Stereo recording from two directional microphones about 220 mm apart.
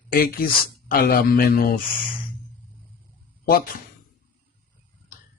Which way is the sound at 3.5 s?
40° left (ahead or behind).